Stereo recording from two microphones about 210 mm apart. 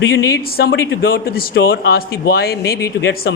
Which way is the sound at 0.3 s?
50° left (ahead or behind).